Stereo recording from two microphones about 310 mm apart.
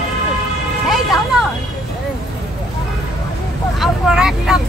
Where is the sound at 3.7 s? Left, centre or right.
Centre.